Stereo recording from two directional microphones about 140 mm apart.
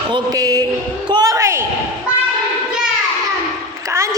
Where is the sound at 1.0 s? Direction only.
30° right (ahead or behind).